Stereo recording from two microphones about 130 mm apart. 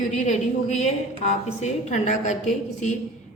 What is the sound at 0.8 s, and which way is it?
A woman's voice, 60° left (ahead or behind).